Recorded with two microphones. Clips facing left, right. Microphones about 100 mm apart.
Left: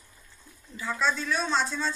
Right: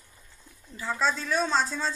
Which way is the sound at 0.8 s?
30° right (ahead or behind).